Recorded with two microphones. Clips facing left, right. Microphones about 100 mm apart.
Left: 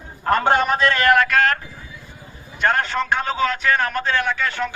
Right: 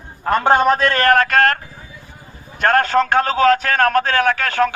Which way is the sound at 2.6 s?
55° right (ahead or behind).